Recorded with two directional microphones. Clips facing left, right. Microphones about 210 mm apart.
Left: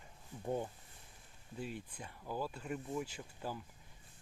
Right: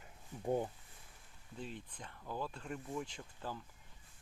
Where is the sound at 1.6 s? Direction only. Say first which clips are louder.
Left 3 dB; 10° left (ahead or behind).